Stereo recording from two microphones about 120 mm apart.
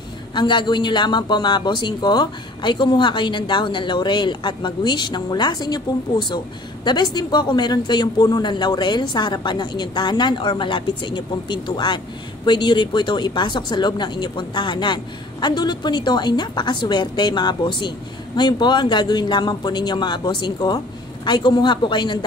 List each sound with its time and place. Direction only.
0.3 s a man's voice: 40° left (ahead or behind)